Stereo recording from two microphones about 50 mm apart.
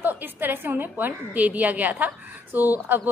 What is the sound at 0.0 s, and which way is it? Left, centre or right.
A woman's voice, right.